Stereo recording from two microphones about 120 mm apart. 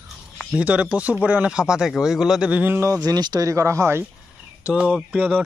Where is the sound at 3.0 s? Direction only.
35° right (ahead or behind).